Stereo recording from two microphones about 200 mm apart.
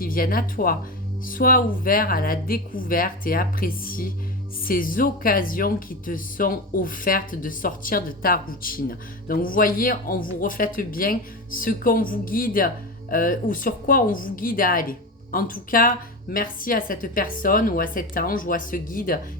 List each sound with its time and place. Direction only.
0.0 s speech: 45° left (ahead or behind)